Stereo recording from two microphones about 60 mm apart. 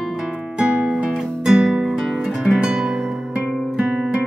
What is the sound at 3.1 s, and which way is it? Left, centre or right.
Music, centre.